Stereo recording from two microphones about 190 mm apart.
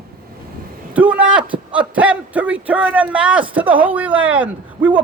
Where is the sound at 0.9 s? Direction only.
5° right (ahead or behind).